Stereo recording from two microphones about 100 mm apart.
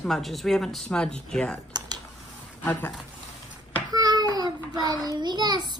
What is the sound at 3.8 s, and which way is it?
Child singing, 40° right (ahead or behind).